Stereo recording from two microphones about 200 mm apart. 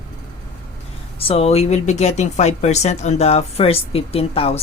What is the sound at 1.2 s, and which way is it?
Speech, 30° left (ahead or behind).